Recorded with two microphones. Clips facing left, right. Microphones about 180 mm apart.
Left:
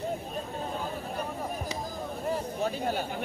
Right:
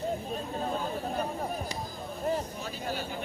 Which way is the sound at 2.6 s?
55° left (ahead or behind).